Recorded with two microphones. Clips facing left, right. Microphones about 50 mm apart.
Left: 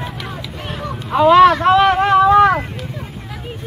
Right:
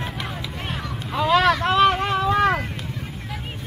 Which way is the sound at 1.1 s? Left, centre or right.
Left.